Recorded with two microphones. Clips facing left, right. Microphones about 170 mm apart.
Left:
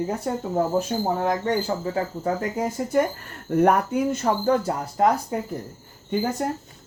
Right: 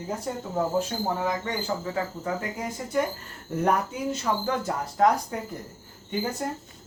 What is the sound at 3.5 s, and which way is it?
Speech, 60° left (ahead or behind).